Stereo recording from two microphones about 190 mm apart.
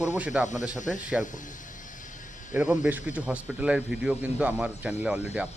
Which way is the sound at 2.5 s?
10° right (ahead or behind).